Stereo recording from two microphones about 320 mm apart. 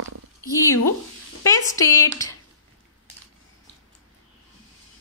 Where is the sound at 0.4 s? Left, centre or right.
Centre.